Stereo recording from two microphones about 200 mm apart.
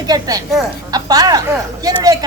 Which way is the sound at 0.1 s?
20° right (ahead or behind).